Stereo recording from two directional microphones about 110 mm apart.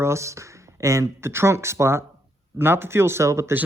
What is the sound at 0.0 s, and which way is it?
Speech, 25° right (ahead or behind).